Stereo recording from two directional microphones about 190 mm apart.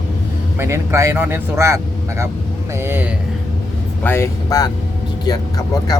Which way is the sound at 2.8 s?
10° right (ahead or behind).